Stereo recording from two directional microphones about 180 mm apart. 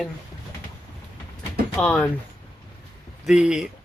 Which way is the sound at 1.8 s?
10° left (ahead or behind).